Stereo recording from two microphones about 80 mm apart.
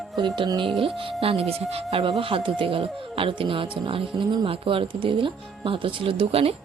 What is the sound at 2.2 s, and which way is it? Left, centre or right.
Speech, right.